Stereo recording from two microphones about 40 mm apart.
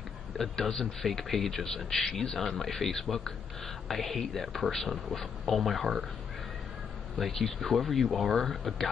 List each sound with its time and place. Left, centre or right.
0.4 s a man's voice: centre
7.2 s speech: centre